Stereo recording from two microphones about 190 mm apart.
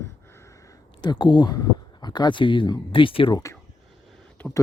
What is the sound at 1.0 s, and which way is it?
Speech, 25° left (ahead or behind).